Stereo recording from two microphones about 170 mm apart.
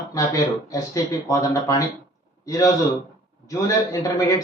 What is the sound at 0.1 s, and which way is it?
A man's voice, 20° left (ahead or behind).